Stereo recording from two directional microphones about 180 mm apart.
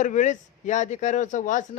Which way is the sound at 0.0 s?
45° left (ahead or behind).